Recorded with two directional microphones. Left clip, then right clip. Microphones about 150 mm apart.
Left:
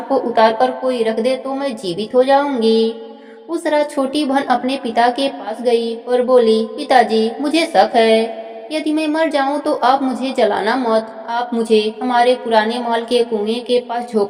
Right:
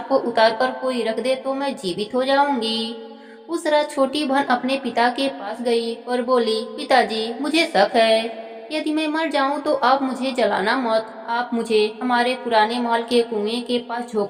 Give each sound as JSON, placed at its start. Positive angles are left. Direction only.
{"t": 0.1, "sound": "a woman's voice", "side_deg": 30}